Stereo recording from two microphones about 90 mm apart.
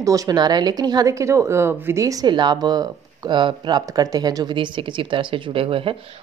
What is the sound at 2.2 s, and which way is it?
Speech, 55° right (ahead or behind).